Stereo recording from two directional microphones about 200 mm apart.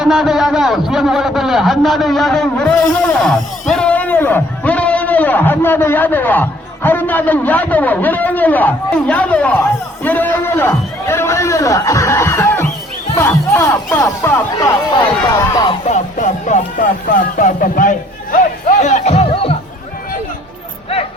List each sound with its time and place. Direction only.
0.0 s a man's voice: centre (ahead or behind); by 15.7 s 20° left (ahead or behind)
15.9 s speech: 40° left (ahead or behind)